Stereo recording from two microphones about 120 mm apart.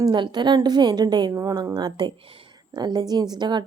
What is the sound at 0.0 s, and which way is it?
Speech, 40° right (ahead or behind).